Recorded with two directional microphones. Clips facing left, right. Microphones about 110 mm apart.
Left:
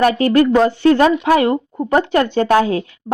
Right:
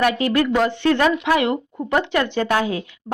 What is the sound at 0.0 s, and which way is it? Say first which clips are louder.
Speech: left 6 dB; 35° left (ahead or behind).